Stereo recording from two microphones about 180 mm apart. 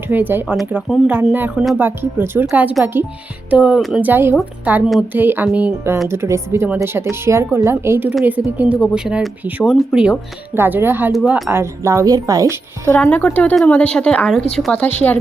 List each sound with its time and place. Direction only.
0.1 s speech: 10° right (ahead or behind)
11.1 s speech: centre (ahead or behind)
11.4 s speech: 15° right (ahead or behind)
12.9 s a woman's voice: 10° left (ahead or behind)